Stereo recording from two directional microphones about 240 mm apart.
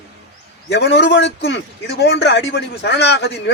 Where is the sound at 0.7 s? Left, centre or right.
Left.